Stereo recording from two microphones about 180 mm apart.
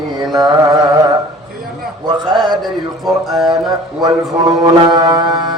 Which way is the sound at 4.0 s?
20° right (ahead or behind).